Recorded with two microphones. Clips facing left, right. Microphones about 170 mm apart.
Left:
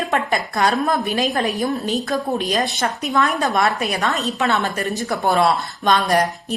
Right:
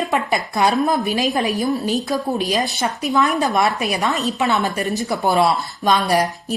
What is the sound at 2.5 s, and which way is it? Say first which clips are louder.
A woman's voice: even; centre (ahead or behind).